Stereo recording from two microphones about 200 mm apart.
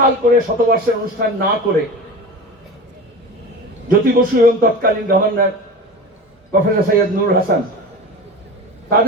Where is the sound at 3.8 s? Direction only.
45° right (ahead or behind).